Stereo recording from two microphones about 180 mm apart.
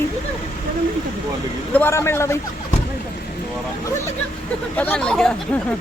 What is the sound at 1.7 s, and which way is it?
Speech, 15° left (ahead or behind).